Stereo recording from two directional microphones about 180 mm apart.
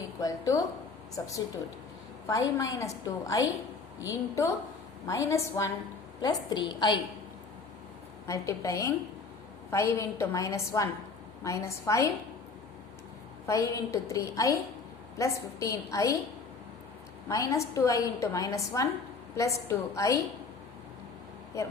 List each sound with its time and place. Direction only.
0.2 s a woman's voice: 20° left (ahead or behind)
2.2 s a woman's voice: 20° left (ahead or behind)
8.3 s a woman's voice: 20° left (ahead or behind)
13.5 s a woman's voice: 20° left (ahead or behind)
17.2 s a woman's voice: 15° left (ahead or behind)